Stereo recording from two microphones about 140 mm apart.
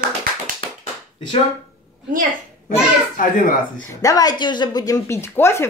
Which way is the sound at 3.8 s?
25° left (ahead or behind).